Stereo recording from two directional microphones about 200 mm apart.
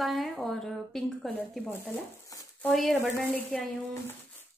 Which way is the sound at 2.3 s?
15° left (ahead or behind).